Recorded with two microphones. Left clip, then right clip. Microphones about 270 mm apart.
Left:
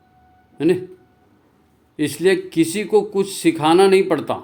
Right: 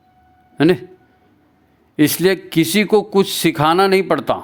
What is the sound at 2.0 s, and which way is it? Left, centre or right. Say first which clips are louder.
Speech: right 2 dB; right.